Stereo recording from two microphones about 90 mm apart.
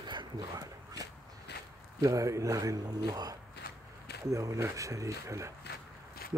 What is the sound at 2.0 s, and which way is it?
A man's voice, 40° right (ahead or behind).